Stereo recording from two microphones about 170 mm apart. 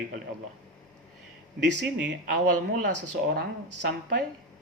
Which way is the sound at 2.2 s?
50° right (ahead or behind).